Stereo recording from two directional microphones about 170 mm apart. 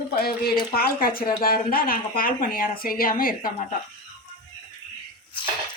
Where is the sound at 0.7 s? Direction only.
60° left (ahead or behind).